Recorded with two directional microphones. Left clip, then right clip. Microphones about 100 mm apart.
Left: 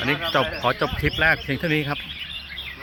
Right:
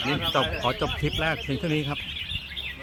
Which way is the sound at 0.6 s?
15° left (ahead or behind).